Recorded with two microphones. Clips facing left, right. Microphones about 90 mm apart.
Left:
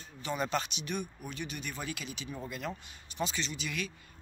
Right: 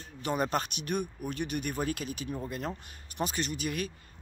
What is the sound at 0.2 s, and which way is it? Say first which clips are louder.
Speech: right 3 dB; 45° right (ahead or behind).